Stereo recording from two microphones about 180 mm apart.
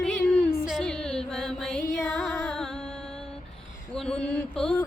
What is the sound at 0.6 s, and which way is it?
Music, centre (ahead or behind).